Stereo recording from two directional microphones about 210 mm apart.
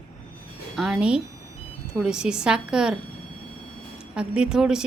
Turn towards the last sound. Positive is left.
turn(degrees=-5)  # may be behind; listen again after turning